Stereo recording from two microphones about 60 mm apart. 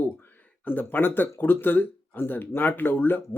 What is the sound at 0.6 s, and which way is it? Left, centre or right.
Speech, left.